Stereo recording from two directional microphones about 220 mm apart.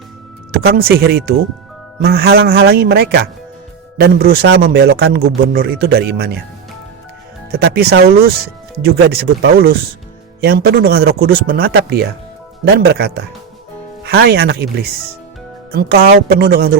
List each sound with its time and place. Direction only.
0.5 s speech: 45° right (ahead or behind)
7.5 s speech: 45° right (ahead or behind)